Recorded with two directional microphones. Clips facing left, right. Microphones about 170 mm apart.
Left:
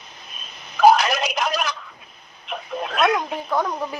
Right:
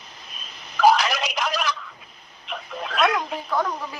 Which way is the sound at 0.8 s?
50° left (ahead or behind).